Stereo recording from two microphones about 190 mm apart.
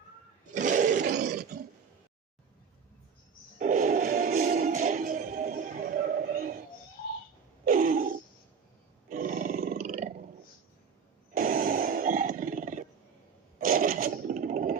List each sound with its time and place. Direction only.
0.5 s roar: 40° right (ahead or behind)
1.1 s roar: 55° right (ahead or behind)
3.6 s music: 45° right (ahead or behind)
7.6 s a sound: 45° right (ahead or behind)
9.0 s roar: 45° right (ahead or behind)
11.3 s a sound: 50° right (ahead or behind)
13.6 s scrape: 45° right (ahead or behind)